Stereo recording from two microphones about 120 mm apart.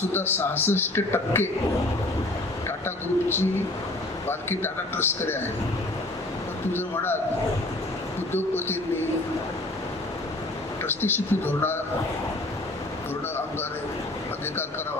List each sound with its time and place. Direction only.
0.1 s speech: 20° left (ahead or behind)
2.6 s a man's voice: 20° left (ahead or behind)
6.7 s speech: 20° left (ahead or behind)
8.3 s speech: 20° left (ahead or behind)
10.8 s speech: 20° left (ahead or behind)